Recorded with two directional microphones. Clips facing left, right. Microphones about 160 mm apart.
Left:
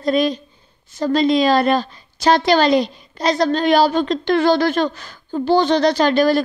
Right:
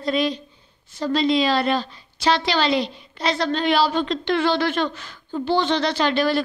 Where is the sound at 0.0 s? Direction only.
45° left (ahead or behind).